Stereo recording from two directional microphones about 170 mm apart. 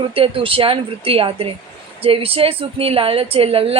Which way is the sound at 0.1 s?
30° right (ahead or behind).